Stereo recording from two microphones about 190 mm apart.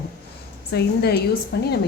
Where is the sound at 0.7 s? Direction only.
55° left (ahead or behind).